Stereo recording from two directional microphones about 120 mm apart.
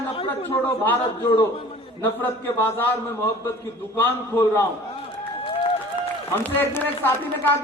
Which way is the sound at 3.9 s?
15° left (ahead or behind).